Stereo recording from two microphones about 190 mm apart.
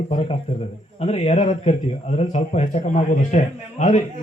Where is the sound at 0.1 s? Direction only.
35° left (ahead or behind).